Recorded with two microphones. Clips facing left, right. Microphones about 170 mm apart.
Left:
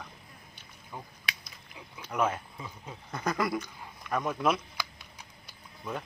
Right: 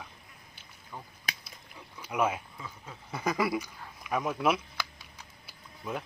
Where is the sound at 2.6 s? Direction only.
15° left (ahead or behind).